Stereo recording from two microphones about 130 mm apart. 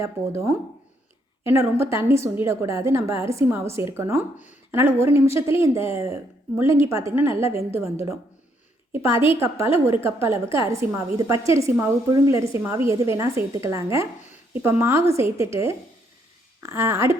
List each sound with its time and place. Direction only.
0.0 s a woman's voice: 20° right (ahead or behind)
9.1 s a woman's voice: 45° left (ahead or behind)
10.0 s a woman's voice: 20° right (ahead or behind)
16.6 s a woman's voice: 20° right (ahead or behind)